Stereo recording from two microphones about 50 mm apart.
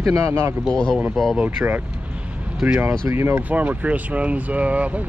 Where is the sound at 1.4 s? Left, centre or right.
Right.